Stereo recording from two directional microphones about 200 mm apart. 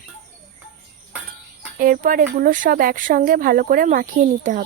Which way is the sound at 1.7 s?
45° right (ahead or behind).